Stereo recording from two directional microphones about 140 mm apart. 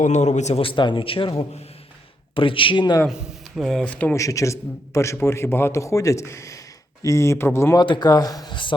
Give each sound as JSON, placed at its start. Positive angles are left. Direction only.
{"t": 0.0, "sound": "a man's voice", "side_deg": 55}
{"t": 3.1, "sound": "a man's voice", "side_deg": -5}
{"t": 4.2, "sound": "a man's voice", "side_deg": 25}
{"t": 7.8, "sound": "a man's voice", "side_deg": 30}